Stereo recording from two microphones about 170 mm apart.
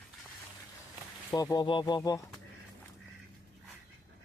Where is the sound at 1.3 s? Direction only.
20° left (ahead or behind).